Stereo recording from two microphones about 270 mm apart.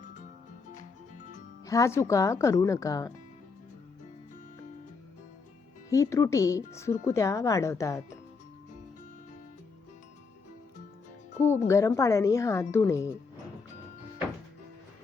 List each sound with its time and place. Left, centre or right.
0.0 s music: left
1.6 s speech: centre
5.9 s speech: centre
11.7 s speech: centre